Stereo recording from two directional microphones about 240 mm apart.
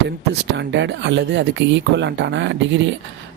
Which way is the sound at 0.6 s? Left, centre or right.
Right.